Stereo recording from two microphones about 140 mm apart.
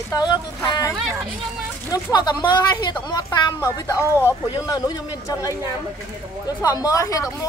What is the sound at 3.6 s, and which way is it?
Speech, 15° left (ahead or behind).